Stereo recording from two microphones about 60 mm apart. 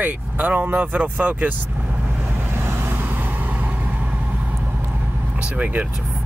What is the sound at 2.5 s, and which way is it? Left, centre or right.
Vehicle, right.